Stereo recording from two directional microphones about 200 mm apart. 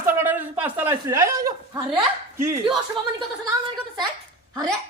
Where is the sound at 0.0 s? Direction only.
10° right (ahead or behind).